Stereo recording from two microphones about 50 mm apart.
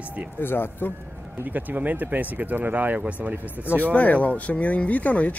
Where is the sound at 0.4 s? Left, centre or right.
Left.